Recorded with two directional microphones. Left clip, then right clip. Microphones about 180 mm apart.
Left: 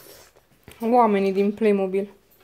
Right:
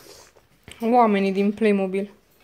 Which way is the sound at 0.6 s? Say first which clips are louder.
Even; 10° left (ahead or behind).